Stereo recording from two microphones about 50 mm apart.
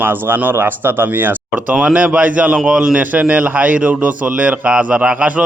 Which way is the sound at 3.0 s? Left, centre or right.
Right.